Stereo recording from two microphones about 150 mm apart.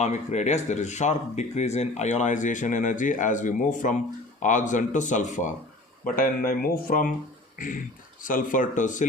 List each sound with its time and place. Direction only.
0.0 s speech: 50° left (ahead or behind)
6.1 s speech: 70° left (ahead or behind)
8.2 s speech: 65° left (ahead or behind)